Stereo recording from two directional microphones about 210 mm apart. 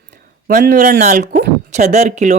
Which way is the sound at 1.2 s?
55° right (ahead or behind).